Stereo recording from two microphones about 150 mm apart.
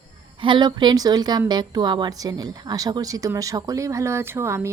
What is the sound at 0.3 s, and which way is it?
Speech, 35° right (ahead or behind).